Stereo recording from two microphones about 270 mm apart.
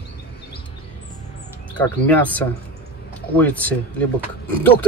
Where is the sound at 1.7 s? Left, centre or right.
Centre.